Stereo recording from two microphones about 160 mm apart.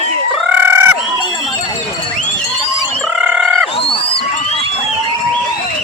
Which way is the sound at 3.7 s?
35° left (ahead or behind).